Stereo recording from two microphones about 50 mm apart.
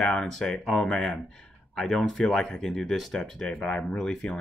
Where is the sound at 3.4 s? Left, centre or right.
Left.